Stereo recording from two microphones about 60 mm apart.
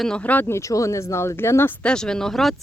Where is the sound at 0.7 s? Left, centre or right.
Left.